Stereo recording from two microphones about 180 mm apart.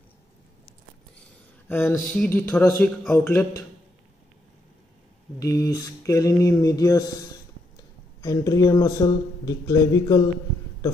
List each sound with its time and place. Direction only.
1.7 s speech: 10° left (ahead or behind)
5.4 s speech: 20° left (ahead or behind)